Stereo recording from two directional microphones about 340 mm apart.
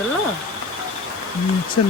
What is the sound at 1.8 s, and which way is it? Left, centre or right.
Speech, left.